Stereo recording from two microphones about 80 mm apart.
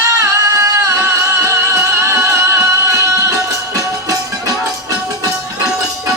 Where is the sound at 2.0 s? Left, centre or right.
Right.